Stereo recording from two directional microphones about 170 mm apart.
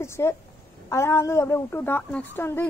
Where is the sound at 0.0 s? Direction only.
15° left (ahead or behind).